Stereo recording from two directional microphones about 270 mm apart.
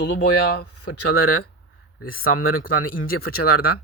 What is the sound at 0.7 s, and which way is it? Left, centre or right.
Speech, left.